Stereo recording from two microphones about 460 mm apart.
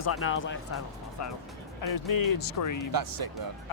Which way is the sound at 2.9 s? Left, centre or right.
Right.